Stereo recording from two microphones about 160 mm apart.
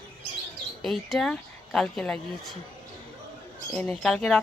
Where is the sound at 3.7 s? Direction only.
5° left (ahead or behind).